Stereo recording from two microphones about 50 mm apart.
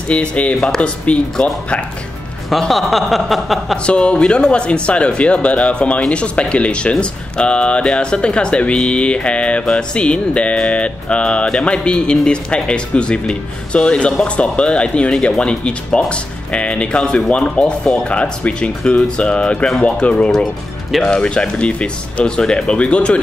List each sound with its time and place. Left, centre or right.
0.1 s speech: left
2.7 s a sound: centre
3.7 s speech: centre